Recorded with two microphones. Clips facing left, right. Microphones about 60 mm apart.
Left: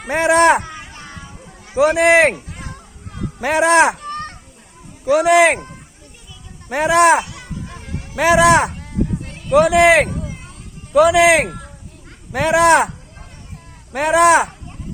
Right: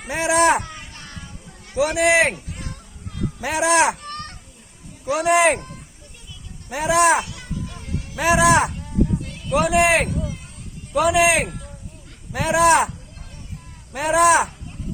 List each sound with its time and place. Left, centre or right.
0.0 s speech: left
0.9 s music: centre
1.7 s a man's voice: left
2.0 s speech: left
3.4 s speech: left
5.0 s speech: left
6.7 s speech: left
7.3 s a sound: left
8.1 s speech: left
10.9 s speech: left
13.9 s speech: left